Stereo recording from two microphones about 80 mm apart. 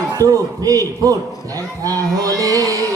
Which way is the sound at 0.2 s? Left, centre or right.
Right.